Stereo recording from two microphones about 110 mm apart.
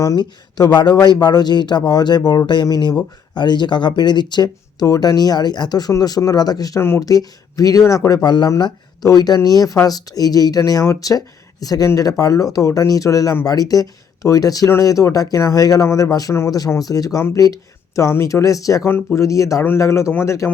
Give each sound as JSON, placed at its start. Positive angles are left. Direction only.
{"t": 0.2, "sound": "speech", "side_deg": 40}
{"t": 6.8, "sound": "speech", "side_deg": 25}
{"t": 7.1, "sound": "speech", "side_deg": 35}